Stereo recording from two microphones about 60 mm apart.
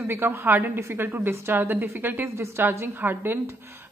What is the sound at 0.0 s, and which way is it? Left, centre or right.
Speech, right.